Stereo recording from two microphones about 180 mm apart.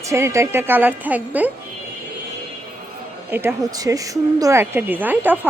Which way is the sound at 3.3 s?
10° right (ahead or behind).